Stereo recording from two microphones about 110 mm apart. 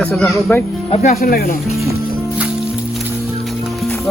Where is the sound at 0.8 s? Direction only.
80° left.